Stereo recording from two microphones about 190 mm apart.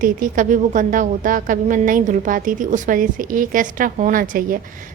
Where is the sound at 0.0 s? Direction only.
45° right (ahead or behind).